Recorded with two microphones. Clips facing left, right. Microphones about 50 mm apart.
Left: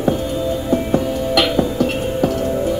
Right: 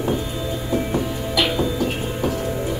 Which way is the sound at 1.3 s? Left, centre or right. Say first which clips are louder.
Left 4 dB; left.